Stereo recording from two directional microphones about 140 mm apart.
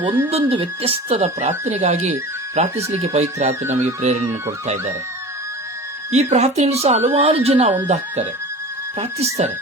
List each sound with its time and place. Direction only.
0.3 s a woman's voice: 45° right (ahead or behind)
6.1 s a woman's voice: 50° right (ahead or behind)